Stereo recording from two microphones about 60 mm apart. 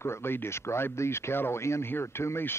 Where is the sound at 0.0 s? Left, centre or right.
Left.